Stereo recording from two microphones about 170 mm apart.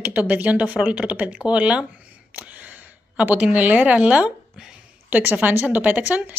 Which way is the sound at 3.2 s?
10° right (ahead or behind).